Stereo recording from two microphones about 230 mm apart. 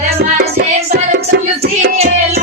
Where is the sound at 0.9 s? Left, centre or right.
Right.